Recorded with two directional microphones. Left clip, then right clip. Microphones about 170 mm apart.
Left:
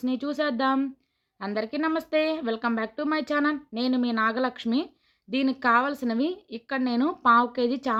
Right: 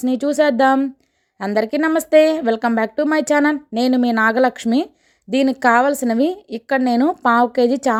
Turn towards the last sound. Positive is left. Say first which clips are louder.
# right 10 dB
turn(degrees=-45)  # may be behind; listen again after turning